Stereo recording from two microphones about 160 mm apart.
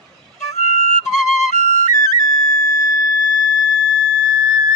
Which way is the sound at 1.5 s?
45° left (ahead or behind).